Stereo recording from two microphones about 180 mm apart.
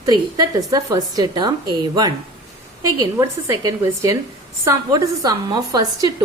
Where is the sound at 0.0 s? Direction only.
20° right (ahead or behind).